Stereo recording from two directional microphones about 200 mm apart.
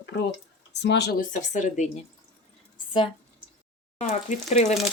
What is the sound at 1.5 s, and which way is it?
Speech, 40° left (ahead or behind).